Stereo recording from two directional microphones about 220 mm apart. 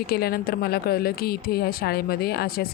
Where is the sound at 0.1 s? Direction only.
45° left (ahead or behind).